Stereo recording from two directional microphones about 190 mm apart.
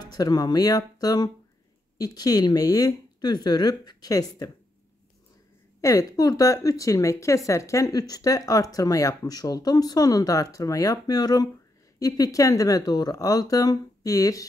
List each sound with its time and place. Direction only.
0.0 s speech: 20° left (ahead or behind)
5.8 s a woman's voice: 15° left (ahead or behind)